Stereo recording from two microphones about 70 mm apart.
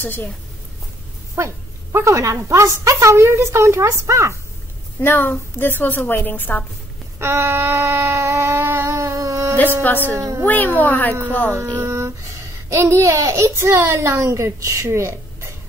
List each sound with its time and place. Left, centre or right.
0.0 s a woman's voice: left
1.3 s a woman's voice: right
5.0 s a woman's voice: left
7.2 s a sound: right
9.8 s a woman's voice: left
10.1 s a woman's voice: right
10.4 s a woman's voice: left
11.7 s a woman's voice: right